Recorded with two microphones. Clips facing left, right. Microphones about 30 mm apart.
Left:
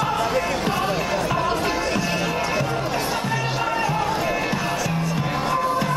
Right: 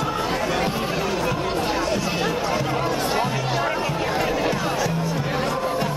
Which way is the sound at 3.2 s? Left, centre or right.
Centre.